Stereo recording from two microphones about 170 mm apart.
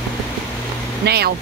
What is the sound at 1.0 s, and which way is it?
Speech, 70° right (ahead or behind).